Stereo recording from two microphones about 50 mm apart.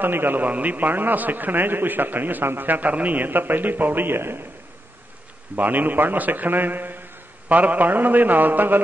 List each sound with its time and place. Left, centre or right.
0.0 s a man's voice: right
5.6 s a man's voice: right